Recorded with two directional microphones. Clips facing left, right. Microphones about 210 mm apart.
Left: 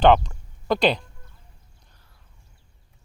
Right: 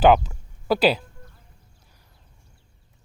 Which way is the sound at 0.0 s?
5° right (ahead or behind).